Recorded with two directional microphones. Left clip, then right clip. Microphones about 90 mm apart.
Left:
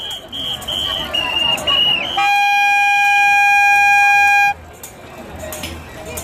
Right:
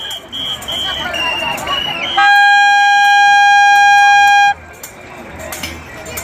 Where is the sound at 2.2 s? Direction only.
5° left (ahead or behind).